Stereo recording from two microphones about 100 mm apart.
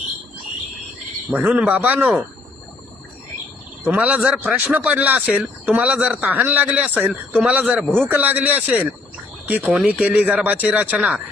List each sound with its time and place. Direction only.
1.3 s speech: 15° right (ahead or behind)
3.8 s speech: 15° right (ahead or behind)
9.6 s speech: 5° right (ahead or behind)